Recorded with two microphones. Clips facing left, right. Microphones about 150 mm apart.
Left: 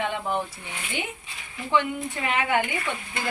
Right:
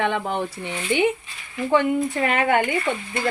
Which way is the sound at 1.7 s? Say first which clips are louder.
Right 5 dB; 50° right (ahead or behind).